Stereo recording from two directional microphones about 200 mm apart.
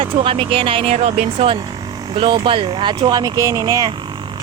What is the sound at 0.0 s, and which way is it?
Speech, 25° right (ahead or behind).